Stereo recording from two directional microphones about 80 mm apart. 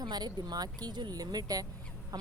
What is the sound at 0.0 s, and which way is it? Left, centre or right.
Speech, right.